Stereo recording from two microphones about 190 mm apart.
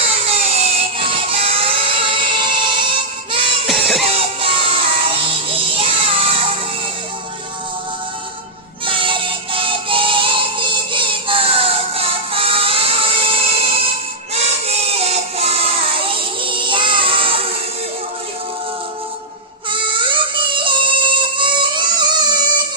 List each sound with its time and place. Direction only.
0.3 s a sound: 35° right (ahead or behind)
3.3 s music: 30° right (ahead or behind)
3.7 s music: centre (ahead or behind)
4.1 s music: 30° right (ahead or behind)
8.9 s music: 25° right (ahead or behind)
19.7 s music: 25° right (ahead or behind)